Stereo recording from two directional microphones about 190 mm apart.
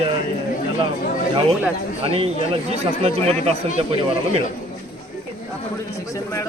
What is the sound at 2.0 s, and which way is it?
Speech, 30° right (ahead or behind).